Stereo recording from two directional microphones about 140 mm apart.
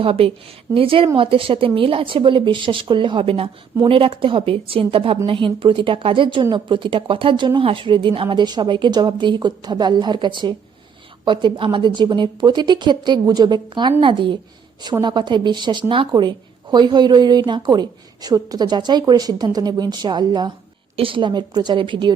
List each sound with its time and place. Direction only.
0.0 s a woman's voice: 40° right (ahead or behind)